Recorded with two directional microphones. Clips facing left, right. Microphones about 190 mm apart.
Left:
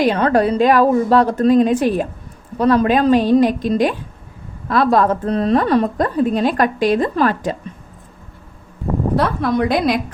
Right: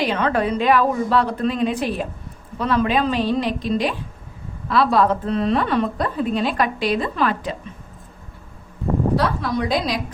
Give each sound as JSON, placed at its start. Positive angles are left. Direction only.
{"t": 0.0, "sound": "a woman's voice", "side_deg": 45}
{"t": 9.1, "sound": "a woman's voice", "side_deg": 55}